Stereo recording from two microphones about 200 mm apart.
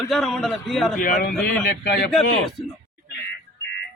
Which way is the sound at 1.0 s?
45° left (ahead or behind).